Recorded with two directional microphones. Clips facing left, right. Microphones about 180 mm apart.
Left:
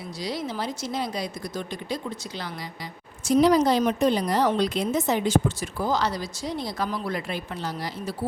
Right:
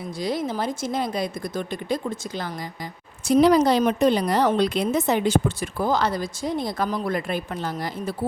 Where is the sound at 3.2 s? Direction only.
65° right (ahead or behind).